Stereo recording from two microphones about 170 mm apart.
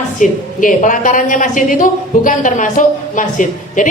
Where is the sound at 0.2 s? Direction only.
50° left (ahead or behind).